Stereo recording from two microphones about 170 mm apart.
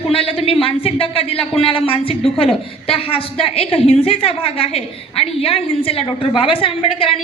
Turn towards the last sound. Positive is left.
turn(degrees=30)  # may be behind; listen again after turning